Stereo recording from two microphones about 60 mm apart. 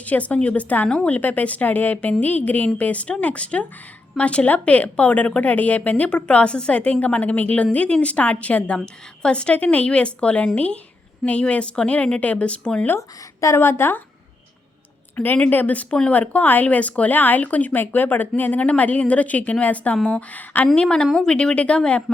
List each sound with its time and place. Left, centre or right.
0.0 s a woman's voice: left
13.0 s speech: left
13.6 s a woman's voice: left
15.1 s a woman's voice: left
20.7 s speech: centre